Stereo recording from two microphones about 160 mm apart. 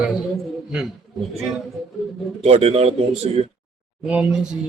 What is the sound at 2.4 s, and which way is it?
Speech, 40° right (ahead or behind).